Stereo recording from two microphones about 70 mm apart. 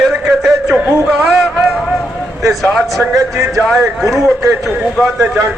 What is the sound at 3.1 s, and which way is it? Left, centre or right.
Music, right.